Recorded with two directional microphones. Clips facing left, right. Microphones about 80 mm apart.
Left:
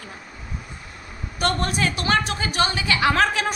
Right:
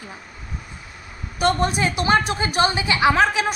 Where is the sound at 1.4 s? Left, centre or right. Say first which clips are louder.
Right 3 dB; centre.